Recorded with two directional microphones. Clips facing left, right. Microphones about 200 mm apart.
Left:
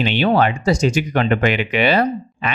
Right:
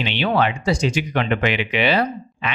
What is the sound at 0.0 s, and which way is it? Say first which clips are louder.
Speech: left 4 dB; 45° left (ahead or behind).